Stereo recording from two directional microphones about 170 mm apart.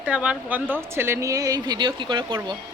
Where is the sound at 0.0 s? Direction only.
5° right (ahead or behind).